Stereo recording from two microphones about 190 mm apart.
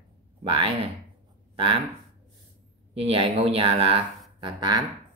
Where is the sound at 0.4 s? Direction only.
30° right (ahead or behind).